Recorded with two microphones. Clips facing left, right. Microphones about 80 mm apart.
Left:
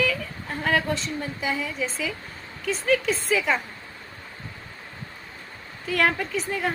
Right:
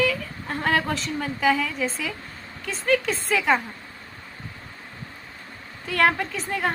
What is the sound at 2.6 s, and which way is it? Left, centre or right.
Speech, right.